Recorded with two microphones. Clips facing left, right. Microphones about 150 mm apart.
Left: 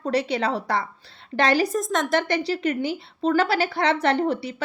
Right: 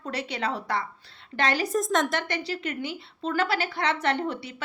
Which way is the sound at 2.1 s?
35° left (ahead or behind).